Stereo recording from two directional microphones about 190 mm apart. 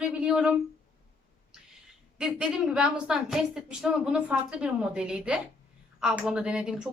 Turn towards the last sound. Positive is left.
turn(degrees=-5)  # may be behind; listen again after turning